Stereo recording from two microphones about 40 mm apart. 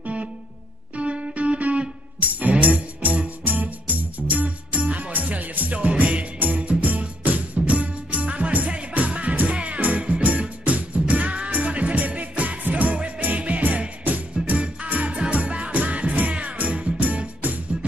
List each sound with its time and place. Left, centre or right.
0.0 s music: right
14.4 s music: centre
15.0 s music: right